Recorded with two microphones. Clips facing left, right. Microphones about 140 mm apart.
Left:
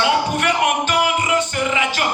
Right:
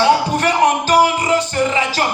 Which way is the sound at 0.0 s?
35° right (ahead or behind).